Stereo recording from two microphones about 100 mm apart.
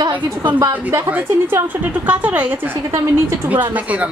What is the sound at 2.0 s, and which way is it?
Speech, 15° right (ahead or behind).